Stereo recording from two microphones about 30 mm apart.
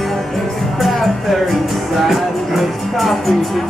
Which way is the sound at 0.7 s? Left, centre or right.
Centre.